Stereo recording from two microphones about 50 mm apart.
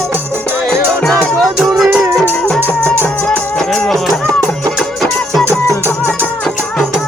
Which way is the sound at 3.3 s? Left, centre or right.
Centre.